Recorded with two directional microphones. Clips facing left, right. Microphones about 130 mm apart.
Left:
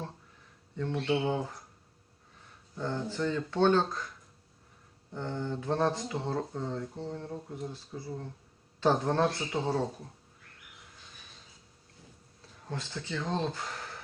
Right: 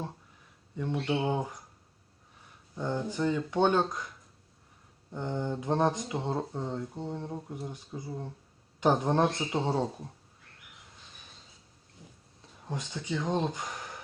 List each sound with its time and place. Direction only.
0.8 s speech: 15° right (ahead or behind)
2.7 s speech: 15° right (ahead or behind)
5.1 s speech: 15° right (ahead or behind)
12.6 s speech: 15° right (ahead or behind)